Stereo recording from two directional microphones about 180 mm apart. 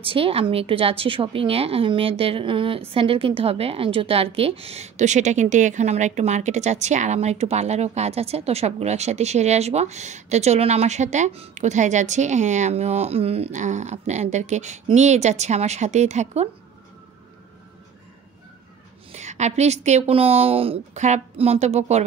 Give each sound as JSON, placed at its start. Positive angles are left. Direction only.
{"t": 0.0, "sound": "a woman's voice", "side_deg": -30}
{"t": 19.1, "sound": "a woman's voice", "side_deg": -40}